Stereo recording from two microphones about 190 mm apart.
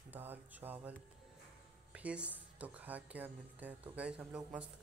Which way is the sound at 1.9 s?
5° right (ahead or behind).